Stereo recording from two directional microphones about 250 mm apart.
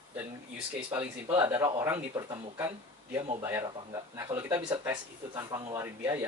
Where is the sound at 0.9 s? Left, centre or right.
Centre.